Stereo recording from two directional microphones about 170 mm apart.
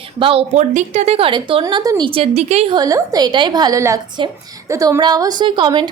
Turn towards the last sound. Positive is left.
turn(degrees=-30)  # may be behind; listen again after turning